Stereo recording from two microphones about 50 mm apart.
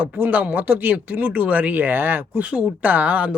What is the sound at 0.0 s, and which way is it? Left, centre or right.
Speech, right.